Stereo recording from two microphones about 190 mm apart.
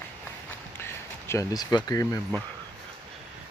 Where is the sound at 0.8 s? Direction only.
15° left (ahead or behind).